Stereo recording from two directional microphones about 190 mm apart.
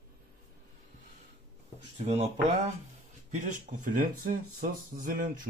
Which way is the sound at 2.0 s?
35° right (ahead or behind).